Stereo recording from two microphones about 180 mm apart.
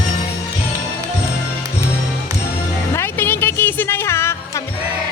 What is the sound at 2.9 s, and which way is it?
Music, 10° left (ahead or behind).